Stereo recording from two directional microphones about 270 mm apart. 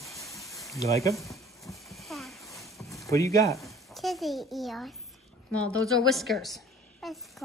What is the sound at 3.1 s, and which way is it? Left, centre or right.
Speech, centre.